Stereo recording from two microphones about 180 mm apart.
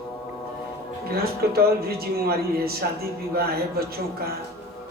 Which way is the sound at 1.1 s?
60° right (ahead or behind).